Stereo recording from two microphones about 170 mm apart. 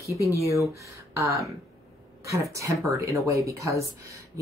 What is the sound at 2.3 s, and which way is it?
Speech, 20° right (ahead or behind).